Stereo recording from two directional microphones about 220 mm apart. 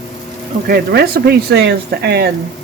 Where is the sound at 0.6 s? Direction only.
45° right (ahead or behind).